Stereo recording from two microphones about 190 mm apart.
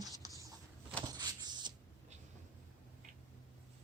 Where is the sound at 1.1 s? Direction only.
20° right (ahead or behind).